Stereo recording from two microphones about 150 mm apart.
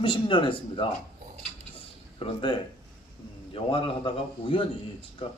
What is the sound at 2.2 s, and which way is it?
A man's voice, 35° left (ahead or behind).